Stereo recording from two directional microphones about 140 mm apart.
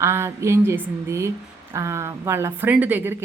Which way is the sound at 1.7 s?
20° right (ahead or behind).